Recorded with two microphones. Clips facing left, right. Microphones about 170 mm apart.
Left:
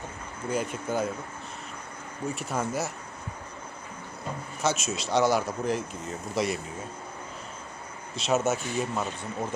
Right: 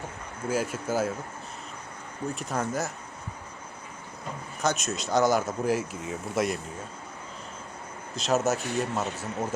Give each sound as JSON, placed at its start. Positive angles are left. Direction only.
{"t": 0.4, "sound": "speech", "side_deg": -5}
{"t": 2.2, "sound": "speech", "side_deg": 0}
{"t": 4.6, "sound": "speech", "side_deg": 0}
{"t": 8.1, "sound": "speech", "side_deg": 0}